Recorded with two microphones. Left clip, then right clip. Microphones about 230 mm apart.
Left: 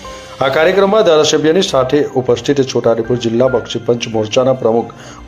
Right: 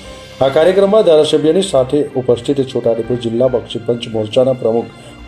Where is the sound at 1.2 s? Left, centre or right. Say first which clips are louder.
Left 1 dB; centre.